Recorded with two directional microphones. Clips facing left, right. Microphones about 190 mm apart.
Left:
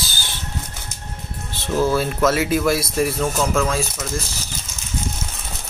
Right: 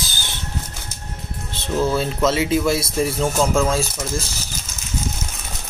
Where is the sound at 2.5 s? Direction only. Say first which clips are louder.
Even; 25° right (ahead or behind).